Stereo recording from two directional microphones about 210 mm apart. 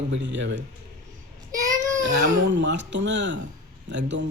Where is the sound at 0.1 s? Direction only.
60° right (ahead or behind).